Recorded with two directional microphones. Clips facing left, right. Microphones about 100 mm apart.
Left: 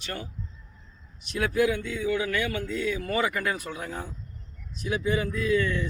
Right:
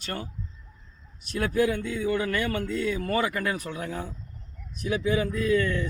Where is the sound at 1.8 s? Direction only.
45° right (ahead or behind).